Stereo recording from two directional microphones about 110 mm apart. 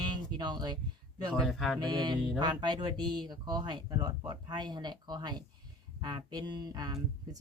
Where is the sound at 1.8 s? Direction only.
40° right (ahead or behind).